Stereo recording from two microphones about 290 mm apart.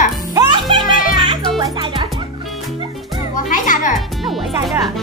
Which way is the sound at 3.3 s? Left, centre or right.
Left.